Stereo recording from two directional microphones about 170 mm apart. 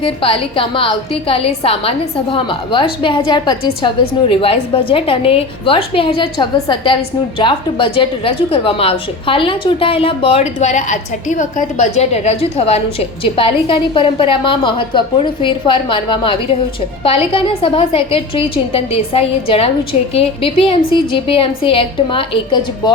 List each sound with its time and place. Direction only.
0.0 s a woman's voice: 30° left (ahead or behind)